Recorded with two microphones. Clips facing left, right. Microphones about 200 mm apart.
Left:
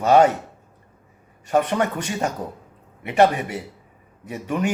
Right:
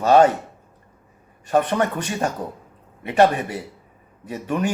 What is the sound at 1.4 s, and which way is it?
A man's voice, 15° left (ahead or behind).